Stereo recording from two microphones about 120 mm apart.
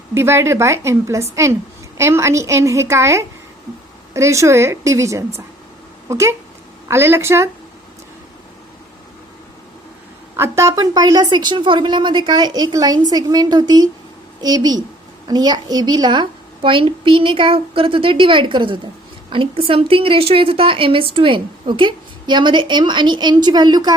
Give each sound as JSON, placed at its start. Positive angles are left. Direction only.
{"t": 0.1, "sound": "a woman's voice", "side_deg": -20}
{"t": 10.3, "sound": "a woman's voice", "side_deg": -20}